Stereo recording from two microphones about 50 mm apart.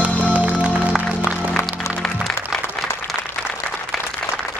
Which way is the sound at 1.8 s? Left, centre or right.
Left.